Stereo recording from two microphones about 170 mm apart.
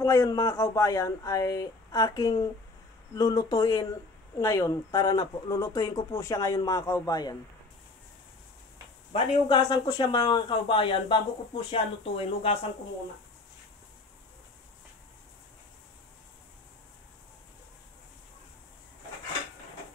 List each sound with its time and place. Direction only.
0.0 s speech: 20° left (ahead or behind)
9.1 s speech: 25° left (ahead or behind)